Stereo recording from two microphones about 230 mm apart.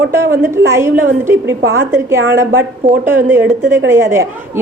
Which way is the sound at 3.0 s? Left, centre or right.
Centre.